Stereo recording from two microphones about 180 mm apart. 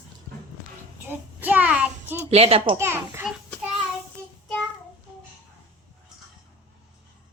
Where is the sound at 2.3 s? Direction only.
35° right (ahead or behind).